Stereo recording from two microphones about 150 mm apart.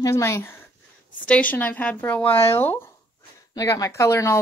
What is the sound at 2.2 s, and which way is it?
Speech, 40° left (ahead or behind).